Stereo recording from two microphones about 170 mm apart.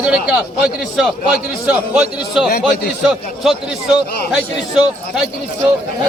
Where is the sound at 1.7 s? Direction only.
10° right (ahead or behind).